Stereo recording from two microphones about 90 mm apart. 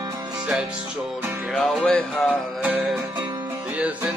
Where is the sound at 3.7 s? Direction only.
15° right (ahead or behind).